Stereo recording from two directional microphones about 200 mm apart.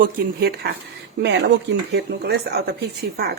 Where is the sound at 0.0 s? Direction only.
50° right (ahead or behind).